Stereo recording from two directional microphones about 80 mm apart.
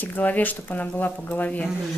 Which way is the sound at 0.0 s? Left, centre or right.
Left.